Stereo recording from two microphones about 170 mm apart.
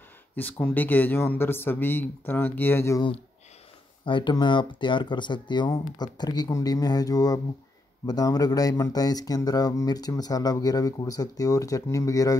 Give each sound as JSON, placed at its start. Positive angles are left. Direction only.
{"t": 0.4, "sound": "speech", "side_deg": 10}
{"t": 4.0, "sound": "speech", "side_deg": 30}